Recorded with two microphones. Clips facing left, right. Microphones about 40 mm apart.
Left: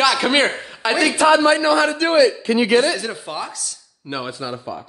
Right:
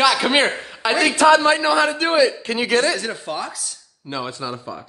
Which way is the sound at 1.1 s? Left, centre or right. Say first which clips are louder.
Right 2 dB; right.